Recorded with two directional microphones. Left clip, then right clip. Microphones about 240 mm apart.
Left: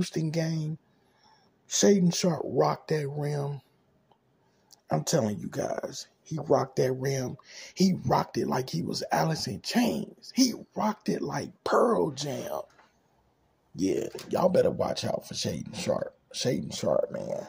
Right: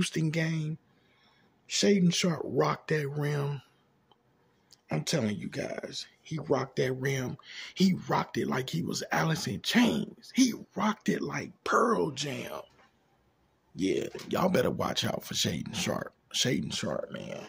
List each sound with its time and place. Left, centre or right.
0.3 s speech: centre
2.2 s speech: centre
2.6 s speech: centre
5.0 s speech: centre
13.7 s speech: centre